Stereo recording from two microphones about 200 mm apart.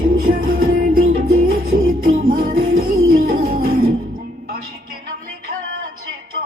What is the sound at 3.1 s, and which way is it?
Music, 45° right (ahead or behind).